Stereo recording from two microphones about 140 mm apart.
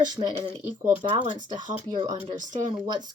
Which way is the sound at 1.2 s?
65° right (ahead or behind).